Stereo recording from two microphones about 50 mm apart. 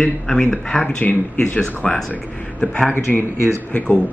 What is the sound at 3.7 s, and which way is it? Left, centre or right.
Speech, left.